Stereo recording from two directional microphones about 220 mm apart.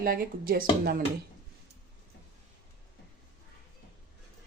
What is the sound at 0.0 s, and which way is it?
Speech, 40° right (ahead or behind).